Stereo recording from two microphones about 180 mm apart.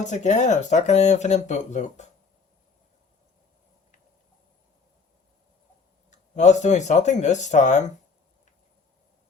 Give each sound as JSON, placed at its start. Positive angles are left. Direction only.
{"t": 0.0, "sound": "speech", "side_deg": 40}
{"t": 6.1, "sound": "speech", "side_deg": 40}